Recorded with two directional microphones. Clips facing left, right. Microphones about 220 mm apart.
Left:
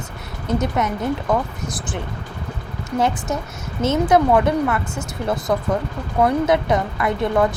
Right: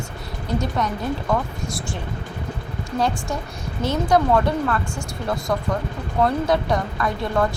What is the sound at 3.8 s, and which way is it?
Speech, 20° left (ahead or behind).